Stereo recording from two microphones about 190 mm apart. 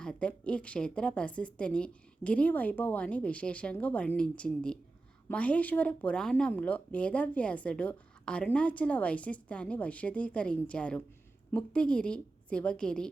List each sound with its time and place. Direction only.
0.0 s a woman's voice: 5° left (ahead or behind)